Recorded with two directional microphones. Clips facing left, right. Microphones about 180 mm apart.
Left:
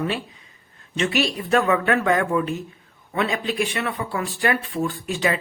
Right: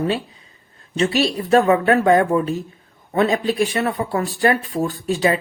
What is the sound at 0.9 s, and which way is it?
Speech, 35° right (ahead or behind).